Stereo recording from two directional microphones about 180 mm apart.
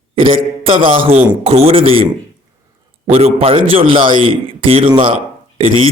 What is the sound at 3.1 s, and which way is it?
A man's voice, 35° right (ahead or behind).